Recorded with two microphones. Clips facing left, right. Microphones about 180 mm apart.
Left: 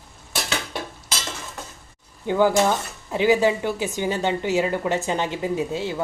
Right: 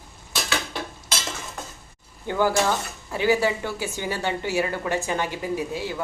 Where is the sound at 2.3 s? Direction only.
20° left (ahead or behind).